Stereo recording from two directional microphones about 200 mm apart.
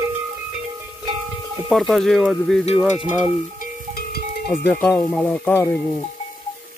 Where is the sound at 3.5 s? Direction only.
50° left (ahead or behind).